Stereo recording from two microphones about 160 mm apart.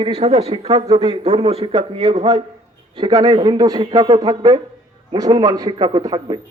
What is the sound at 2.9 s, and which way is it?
A man's voice, 30° right (ahead or behind).